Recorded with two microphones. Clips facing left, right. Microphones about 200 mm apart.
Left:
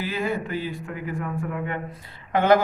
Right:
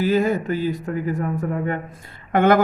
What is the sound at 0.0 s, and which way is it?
Speech, 40° right (ahead or behind).